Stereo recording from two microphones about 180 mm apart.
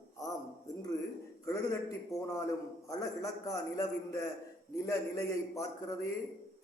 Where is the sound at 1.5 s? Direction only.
15° left (ahead or behind).